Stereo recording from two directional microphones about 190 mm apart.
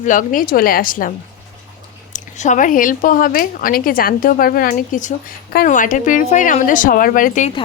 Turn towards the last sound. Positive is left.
turn(degrees=40)  # may be behind; listen again after turning